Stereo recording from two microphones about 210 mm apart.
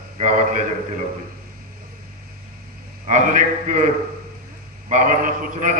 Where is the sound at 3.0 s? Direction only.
35° right (ahead or behind).